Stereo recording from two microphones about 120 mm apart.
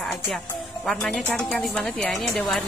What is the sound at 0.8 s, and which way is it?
A woman's voice, 5° left (ahead or behind).